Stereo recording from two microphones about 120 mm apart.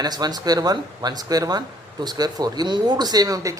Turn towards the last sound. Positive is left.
turn(degrees=-30)  # may be behind; listen again after turning